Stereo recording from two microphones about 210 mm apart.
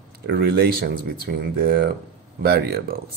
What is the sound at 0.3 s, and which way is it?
Speech, 50° right (ahead or behind).